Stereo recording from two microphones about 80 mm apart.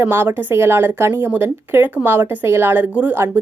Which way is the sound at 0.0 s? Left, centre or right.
Right.